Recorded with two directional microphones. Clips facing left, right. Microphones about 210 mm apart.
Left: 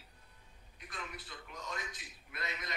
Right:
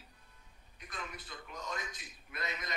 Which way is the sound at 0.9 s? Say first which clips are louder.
Right 1 dB; 45° right (ahead or behind).